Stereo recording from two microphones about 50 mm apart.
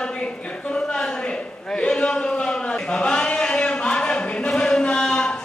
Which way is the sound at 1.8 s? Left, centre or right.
Left.